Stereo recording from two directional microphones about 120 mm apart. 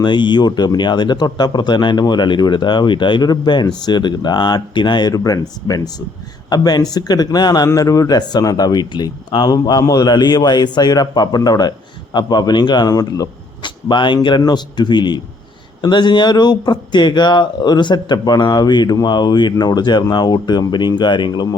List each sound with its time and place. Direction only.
0.0 s speech: 40° left (ahead or behind)